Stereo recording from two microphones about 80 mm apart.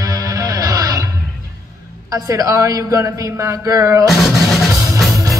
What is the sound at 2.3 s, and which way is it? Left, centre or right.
Speech, right.